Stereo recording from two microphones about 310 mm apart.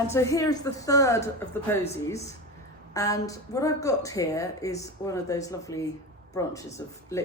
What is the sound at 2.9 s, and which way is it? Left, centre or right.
A woman's voice, centre.